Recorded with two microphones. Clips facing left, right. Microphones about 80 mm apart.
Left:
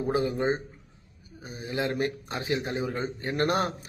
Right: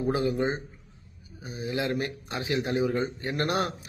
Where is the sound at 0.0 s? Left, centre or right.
Left.